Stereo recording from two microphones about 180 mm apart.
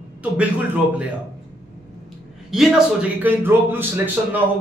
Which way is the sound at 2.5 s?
5° right (ahead or behind).